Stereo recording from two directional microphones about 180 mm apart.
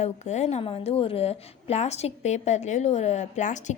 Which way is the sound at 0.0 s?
40° left (ahead or behind).